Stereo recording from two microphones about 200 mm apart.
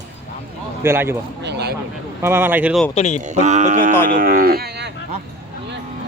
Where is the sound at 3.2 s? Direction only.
35° right (ahead or behind).